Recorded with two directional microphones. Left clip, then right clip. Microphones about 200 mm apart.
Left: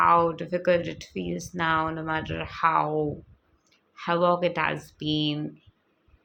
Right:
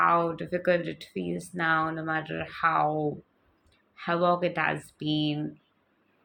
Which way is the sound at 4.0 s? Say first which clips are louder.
Left 2 dB; 20° left (ahead or behind).